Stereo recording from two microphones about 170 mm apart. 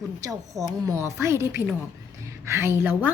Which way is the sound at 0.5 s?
20° right (ahead or behind).